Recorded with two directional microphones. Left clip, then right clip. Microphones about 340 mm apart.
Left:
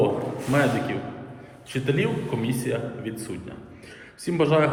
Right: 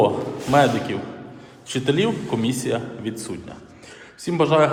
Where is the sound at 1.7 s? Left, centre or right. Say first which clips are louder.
Right 4 dB; centre.